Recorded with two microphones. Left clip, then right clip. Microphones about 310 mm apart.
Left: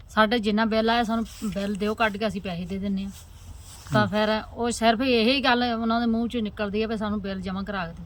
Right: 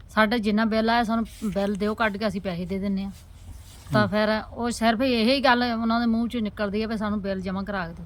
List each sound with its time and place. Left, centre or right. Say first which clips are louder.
0.1 s a woman's voice: left 1 dB; centre